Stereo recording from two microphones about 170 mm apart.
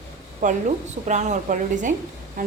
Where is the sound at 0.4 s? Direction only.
45° right (ahead or behind).